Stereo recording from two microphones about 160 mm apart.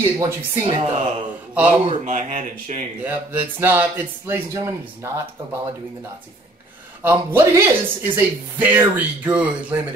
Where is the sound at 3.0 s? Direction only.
10° right (ahead or behind).